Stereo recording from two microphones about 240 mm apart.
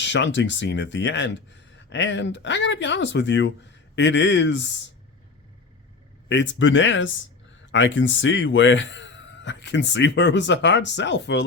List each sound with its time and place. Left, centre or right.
0.0 s speech: left
6.2 s speech: left